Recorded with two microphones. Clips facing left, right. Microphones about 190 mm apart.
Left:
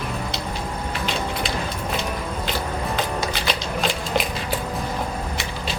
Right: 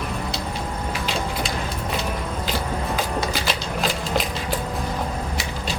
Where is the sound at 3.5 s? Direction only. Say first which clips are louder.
Even; centre (ahead or behind).